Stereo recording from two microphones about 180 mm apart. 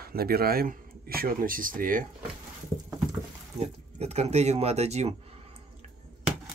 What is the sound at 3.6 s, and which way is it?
Speech, 35° right (ahead or behind).